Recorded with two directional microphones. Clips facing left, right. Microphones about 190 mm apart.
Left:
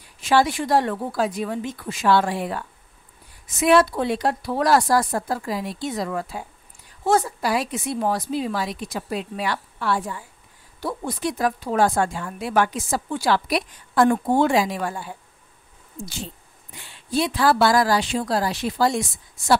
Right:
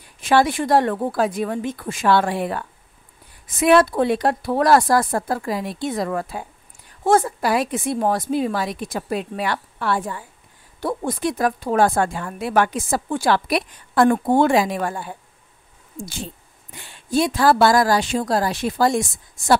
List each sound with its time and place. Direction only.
0.2 s a woman's voice: 55° right (ahead or behind)